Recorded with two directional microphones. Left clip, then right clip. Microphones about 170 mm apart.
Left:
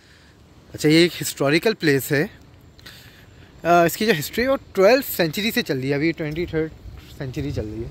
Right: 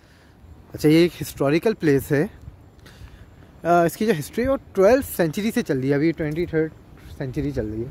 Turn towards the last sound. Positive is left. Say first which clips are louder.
# right 2 dB
turn(degrees=-35)  # may be behind; listen again after turning